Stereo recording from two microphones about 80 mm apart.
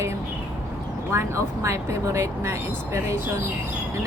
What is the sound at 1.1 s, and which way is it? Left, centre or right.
Speech, right.